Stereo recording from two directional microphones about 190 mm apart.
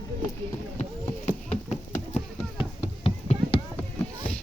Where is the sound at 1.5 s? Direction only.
35° left (ahead or behind).